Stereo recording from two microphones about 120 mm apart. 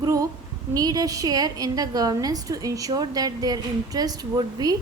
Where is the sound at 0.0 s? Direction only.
30° right (ahead or behind).